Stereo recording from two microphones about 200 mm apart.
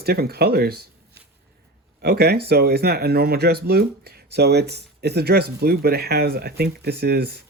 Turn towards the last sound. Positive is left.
turn(degrees=-55)  # may be behind; listen again after turning